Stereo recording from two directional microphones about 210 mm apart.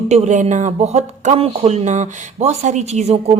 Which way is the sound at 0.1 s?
35° right (ahead or behind).